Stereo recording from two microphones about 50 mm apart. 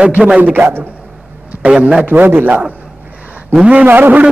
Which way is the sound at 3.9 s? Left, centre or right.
Right.